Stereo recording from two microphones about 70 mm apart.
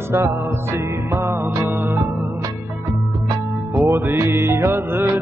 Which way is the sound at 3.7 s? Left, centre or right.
Right.